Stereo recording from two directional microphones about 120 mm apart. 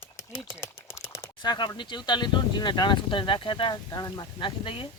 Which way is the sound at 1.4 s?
35° left (ahead or behind).